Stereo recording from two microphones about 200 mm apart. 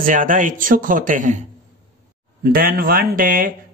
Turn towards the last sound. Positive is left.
turn(degrees=-45)  # may be behind; listen again after turning